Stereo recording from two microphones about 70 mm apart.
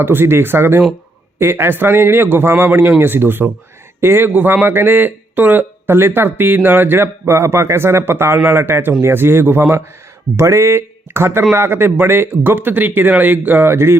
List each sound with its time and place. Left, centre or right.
0.0 s a man's voice: right